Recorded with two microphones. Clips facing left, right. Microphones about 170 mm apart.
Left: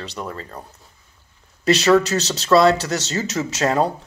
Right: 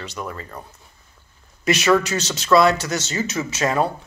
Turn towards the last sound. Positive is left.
turn(degrees=35)  # may be behind; listen again after turning